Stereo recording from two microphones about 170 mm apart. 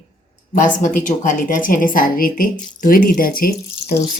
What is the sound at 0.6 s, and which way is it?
A woman's voice, 50° left (ahead or behind).